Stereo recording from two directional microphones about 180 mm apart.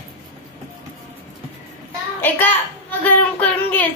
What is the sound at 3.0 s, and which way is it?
Child singing, 10° left (ahead or behind).